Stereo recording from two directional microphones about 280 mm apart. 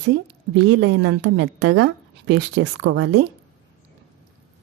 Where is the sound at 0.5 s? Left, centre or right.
Right.